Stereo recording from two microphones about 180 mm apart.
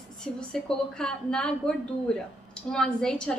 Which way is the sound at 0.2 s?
5° left (ahead or behind).